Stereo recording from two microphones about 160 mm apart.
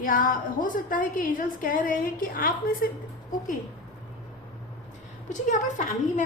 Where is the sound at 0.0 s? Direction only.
60° left (ahead or behind).